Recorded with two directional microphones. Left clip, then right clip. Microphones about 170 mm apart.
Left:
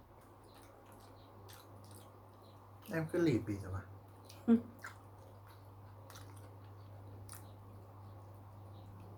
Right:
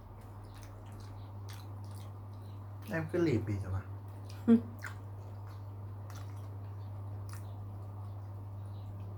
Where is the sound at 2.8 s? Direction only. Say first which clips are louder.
Right 2 dB; 20° left (ahead or behind).